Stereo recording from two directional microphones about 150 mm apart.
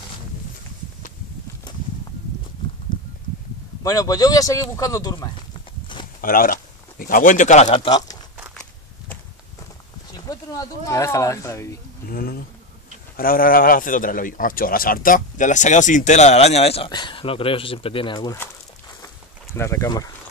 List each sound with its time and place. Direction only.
3.8 s speech: 25° left (ahead or behind)
5.5 s a sound: 35° left (ahead or behind)
6.2 s speech: 70° left (ahead or behind); by 7.8 s 50° left (ahead or behind)
7.8 s speech: 25° left (ahead or behind)
10.1 s speech: 25° left (ahead or behind)
12.1 s speech: 80° left; by 18.4 s 30° left (ahead or behind)
19.5 s speech: 15° left (ahead or behind)